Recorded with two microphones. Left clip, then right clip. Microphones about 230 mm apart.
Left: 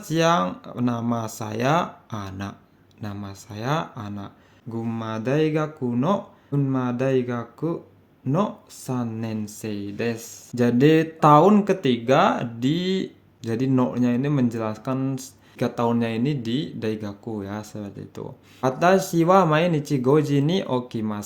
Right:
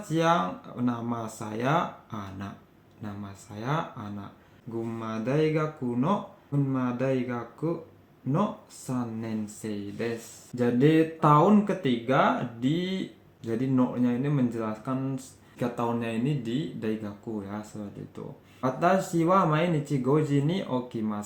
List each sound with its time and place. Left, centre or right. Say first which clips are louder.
0.1 s speech: left 4 dB; left
8.9 s speech: left 4 dB; left